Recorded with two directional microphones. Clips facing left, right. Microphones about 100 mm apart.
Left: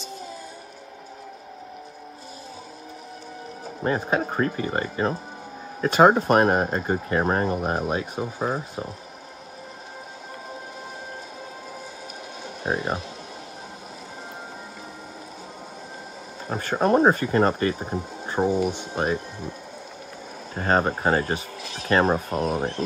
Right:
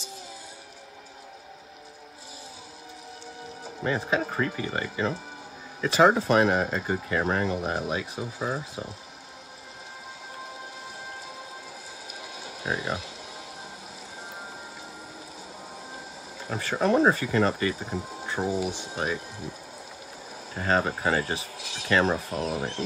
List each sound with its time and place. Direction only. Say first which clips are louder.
3.8 s speech: left 3 dB; 40° left (ahead or behind)
12.6 s speech: left 4 dB; 45° left (ahead or behind)
16.4 s speech: left 3 dB; 40° left (ahead or behind)
20.5 s speech: left 3 dB; 45° left (ahead or behind)